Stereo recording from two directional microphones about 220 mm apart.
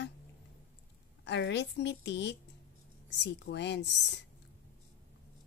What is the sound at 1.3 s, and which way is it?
A woman's voice, 50° left (ahead or behind).